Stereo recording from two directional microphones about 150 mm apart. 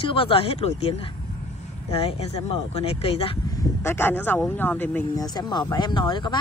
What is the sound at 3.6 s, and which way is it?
Speech, 15° left (ahead or behind).